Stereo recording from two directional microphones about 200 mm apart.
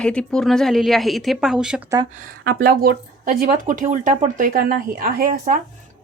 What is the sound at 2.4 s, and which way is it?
A woman's voice, 50° right (ahead or behind).